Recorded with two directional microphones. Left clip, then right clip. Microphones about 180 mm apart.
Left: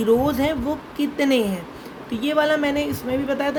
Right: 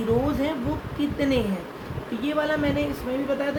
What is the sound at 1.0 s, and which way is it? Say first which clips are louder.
A woman's voice: left 4 dB; 60° left (ahead or behind).